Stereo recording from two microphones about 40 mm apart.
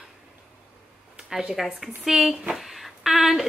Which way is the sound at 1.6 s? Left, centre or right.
Centre.